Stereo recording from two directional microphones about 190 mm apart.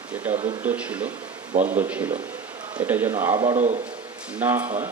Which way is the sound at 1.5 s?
40° right (ahead or behind).